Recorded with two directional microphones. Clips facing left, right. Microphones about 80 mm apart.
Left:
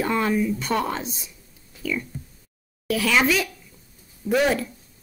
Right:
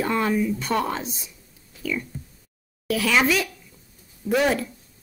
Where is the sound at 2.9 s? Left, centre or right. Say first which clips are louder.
Even; centre.